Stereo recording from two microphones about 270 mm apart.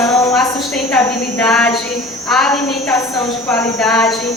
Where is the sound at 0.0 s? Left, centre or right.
Centre.